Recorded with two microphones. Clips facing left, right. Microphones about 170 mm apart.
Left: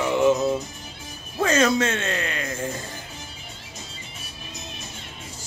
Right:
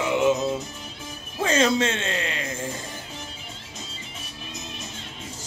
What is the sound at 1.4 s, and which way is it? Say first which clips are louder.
Speech: left 1 dB; 25° right (ahead or behind).